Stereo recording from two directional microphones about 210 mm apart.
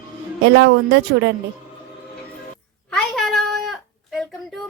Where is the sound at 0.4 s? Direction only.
60° right (ahead or behind).